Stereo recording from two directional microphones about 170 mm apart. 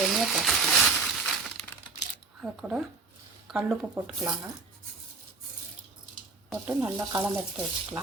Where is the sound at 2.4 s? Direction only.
5° right (ahead or behind).